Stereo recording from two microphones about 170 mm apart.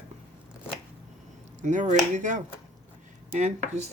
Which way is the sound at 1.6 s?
45° right (ahead or behind).